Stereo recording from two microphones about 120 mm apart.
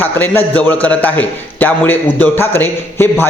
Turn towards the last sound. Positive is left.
turn(degrees=20)  # may be behind; listen again after turning